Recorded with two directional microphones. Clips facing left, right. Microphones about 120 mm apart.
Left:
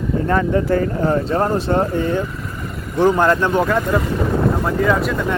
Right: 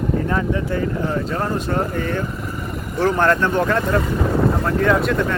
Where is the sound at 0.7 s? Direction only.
45° left (ahead or behind).